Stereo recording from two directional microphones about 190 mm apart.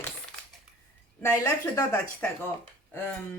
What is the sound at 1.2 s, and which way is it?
Speech, 15° left (ahead or behind).